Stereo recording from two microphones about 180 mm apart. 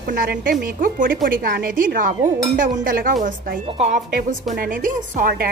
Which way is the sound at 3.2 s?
50° right (ahead or behind).